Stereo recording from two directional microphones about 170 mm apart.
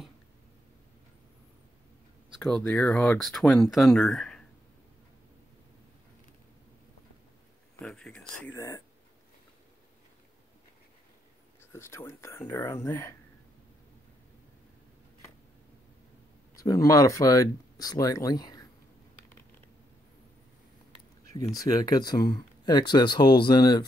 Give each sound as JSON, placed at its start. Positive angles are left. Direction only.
{"t": 2.4, "sound": "speech", "side_deg": 5}
{"t": 7.8, "sound": "a sound", "side_deg": 5}
{"t": 8.5, "sound": "speech", "side_deg": 20}
{"t": 11.7, "sound": "speech", "side_deg": 15}
{"t": 16.5, "sound": "speech", "side_deg": 20}
{"t": 21.6, "sound": "speech", "side_deg": 20}